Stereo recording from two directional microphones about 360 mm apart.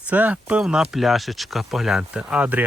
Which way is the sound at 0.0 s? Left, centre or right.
Centre.